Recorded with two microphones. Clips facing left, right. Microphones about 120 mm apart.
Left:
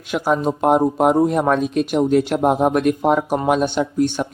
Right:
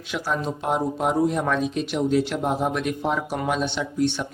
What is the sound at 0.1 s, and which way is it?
Speech, 50° left (ahead or behind).